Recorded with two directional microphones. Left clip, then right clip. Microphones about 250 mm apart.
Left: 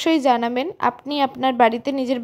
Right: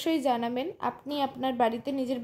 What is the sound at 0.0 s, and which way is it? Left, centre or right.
A woman's voice, left.